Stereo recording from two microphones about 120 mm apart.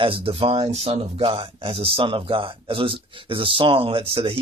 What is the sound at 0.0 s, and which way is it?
Speech, 50° right (ahead or behind).